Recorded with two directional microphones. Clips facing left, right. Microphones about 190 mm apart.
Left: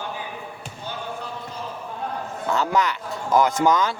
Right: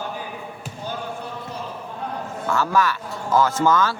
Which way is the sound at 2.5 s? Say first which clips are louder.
Right 1 dB; 20° left (ahead or behind).